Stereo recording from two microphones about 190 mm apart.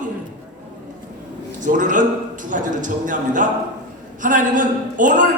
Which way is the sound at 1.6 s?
45° right (ahead or behind).